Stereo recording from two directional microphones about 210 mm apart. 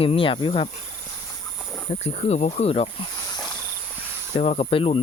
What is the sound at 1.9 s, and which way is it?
Speech, 30° left (ahead or behind).